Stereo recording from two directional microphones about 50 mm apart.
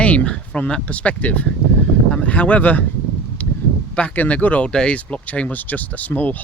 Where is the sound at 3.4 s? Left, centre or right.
Left.